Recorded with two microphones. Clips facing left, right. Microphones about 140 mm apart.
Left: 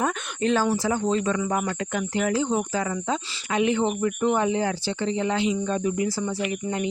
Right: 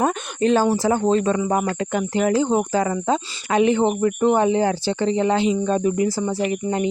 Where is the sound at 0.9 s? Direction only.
45° right (ahead or behind).